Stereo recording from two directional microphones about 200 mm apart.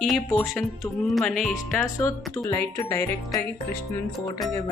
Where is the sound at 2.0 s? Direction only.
15° left (ahead or behind).